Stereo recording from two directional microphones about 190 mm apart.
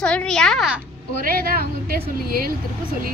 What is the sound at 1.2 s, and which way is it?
Speech, 50° right (ahead or behind).